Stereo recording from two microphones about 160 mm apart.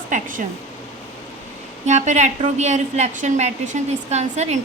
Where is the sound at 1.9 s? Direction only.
45° right (ahead or behind).